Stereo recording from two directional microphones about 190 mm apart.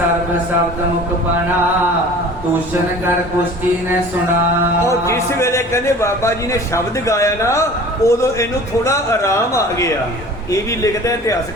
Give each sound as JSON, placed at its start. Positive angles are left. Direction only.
{"t": 4.9, "sound": "a man's voice", "side_deg": 15}